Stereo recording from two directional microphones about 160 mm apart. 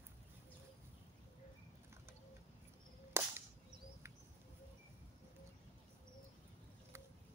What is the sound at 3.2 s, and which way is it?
Whip, 15° right (ahead or behind).